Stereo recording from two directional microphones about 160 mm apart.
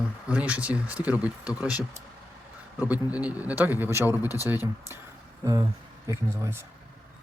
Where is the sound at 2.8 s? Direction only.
10° right (ahead or behind).